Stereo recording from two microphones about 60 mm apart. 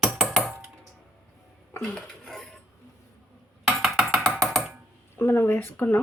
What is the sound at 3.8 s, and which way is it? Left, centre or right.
Music, centre.